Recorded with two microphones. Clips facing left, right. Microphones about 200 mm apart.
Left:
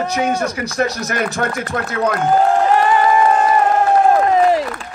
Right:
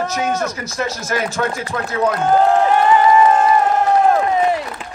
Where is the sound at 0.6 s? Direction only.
60° left (ahead or behind).